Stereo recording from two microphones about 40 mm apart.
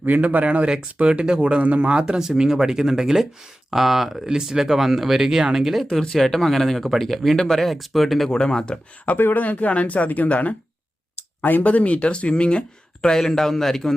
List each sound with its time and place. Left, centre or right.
0.0 s speech: right
1.9 s speech: right
2.1 s speech: centre
5.9 s speech: centre
7.7 s speech: centre
8.3 s speech: centre
9.1 s speech: left
11.4 s speech: left
11.7 s speech: left
13.0 s speech: centre